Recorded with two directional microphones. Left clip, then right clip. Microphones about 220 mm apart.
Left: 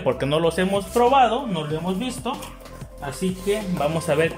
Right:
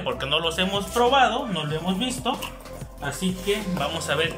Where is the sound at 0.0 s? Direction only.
25° left (ahead or behind).